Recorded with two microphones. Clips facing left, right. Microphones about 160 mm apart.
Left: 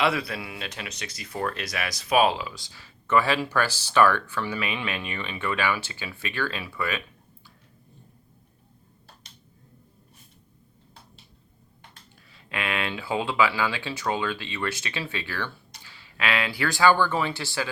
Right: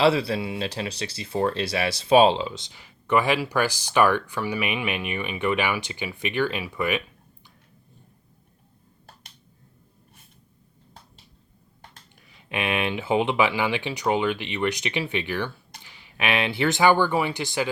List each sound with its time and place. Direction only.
0.0 s speech: 30° right (ahead or behind)
12.3 s speech: 20° right (ahead or behind)